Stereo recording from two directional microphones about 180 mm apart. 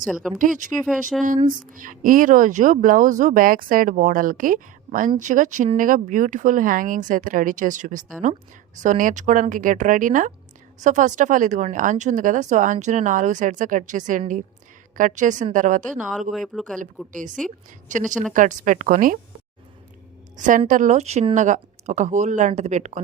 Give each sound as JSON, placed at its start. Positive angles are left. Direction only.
{"t": 0.0, "sound": "speech", "side_deg": 0}
{"t": 1.7, "sound": "speech", "side_deg": -50}
{"t": 16.3, "sound": "speech", "side_deg": 0}
{"t": 17.1, "sound": "a woman's voice", "side_deg": -45}
{"t": 18.1, "sound": "speech", "side_deg": 5}
{"t": 18.3, "sound": "speech", "side_deg": -45}
{"t": 20.3, "sound": "a woman's voice", "side_deg": -45}